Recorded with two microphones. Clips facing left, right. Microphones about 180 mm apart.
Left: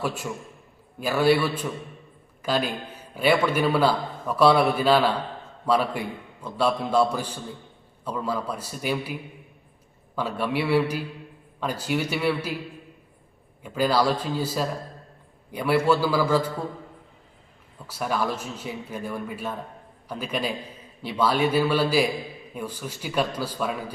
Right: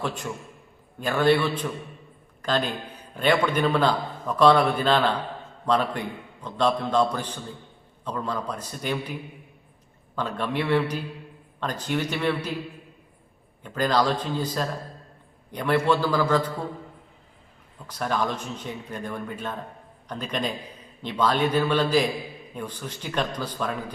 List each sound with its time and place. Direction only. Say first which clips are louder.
0.0 s a man's voice: left 1 dB; 10° left (ahead or behind)
10.2 s a man's voice: left 1 dB; 10° left (ahead or behind)
13.6 s a man's voice: left 1 dB; 10° left (ahead or behind)
17.8 s a man's voice: even; 10° left (ahead or behind)